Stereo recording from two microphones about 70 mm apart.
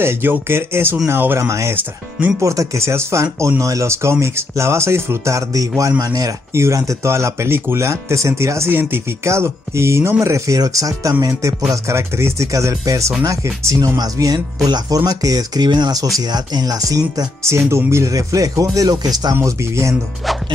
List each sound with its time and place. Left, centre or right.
0.0 s speech: right
1.4 s speech: right
1.8 s speech: right
2.4 s speech: right
6.5 s speech: right
11.7 s speech: right
13.9 s speech: right
17.4 s speech: right
18.1 s speech: right
19.4 s speech: right